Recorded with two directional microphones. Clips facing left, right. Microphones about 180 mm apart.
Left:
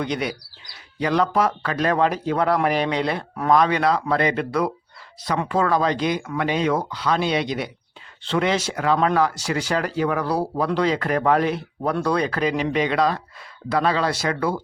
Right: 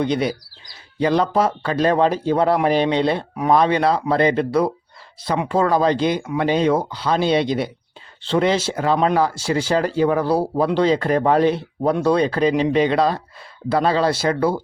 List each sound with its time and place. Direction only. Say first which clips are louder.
0.0 s speech: right 5 dB; 30° right (ahead or behind)